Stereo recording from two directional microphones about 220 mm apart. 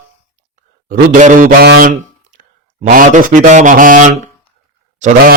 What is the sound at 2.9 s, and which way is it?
Speech, 35° right (ahead or behind).